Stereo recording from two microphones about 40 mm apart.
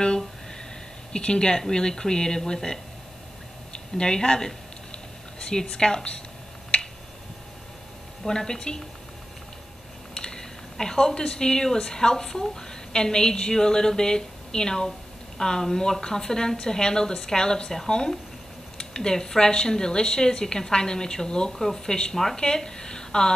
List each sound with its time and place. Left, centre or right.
1.1 s speech: left
3.9 s a woman's voice: centre
8.3 s a woman's voice: centre
10.1 s a woman's voice: centre